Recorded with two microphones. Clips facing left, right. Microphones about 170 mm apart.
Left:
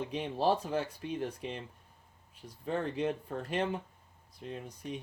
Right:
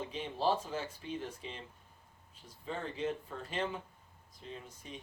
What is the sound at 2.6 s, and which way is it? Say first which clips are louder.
Speech: left 5 dB; 60° left (ahead or behind).